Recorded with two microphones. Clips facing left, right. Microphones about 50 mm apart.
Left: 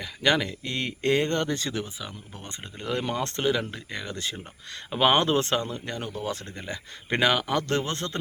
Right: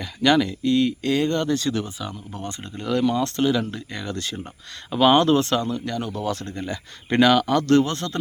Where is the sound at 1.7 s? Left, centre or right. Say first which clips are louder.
Right 5 dB; centre; by 6.0 s left.